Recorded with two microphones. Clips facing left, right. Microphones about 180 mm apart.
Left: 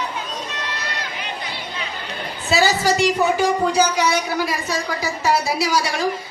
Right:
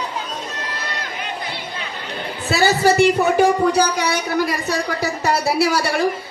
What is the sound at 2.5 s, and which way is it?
A man's voice, 60° right (ahead or behind).